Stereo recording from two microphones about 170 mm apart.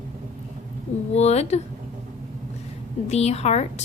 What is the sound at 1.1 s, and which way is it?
Speech, 40° left (ahead or behind).